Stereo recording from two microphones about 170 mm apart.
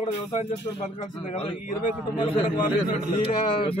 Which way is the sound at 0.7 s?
40° left (ahead or behind).